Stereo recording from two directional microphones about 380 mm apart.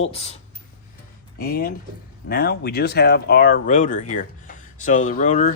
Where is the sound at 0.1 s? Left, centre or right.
Centre.